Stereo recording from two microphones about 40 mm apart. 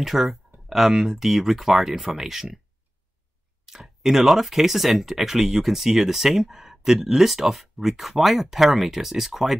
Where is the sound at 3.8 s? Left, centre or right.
Centre.